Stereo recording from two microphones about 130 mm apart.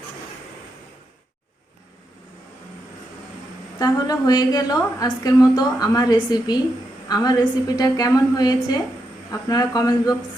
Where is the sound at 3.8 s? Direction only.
30° left (ahead or behind).